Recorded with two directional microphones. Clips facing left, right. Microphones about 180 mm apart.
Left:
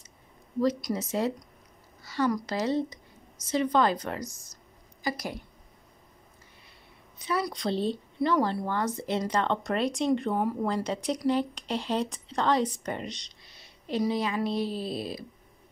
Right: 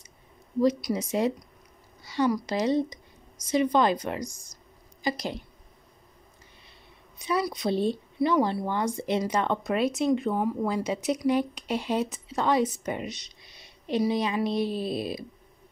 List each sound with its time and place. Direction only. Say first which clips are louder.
0.6 s speech: right 3 dB; 10° right (ahead or behind)
2.3 s a woman's voice: right 3 dB; 15° right (ahead or behind)
7.4 s speech: right 3 dB; 10° right (ahead or behind)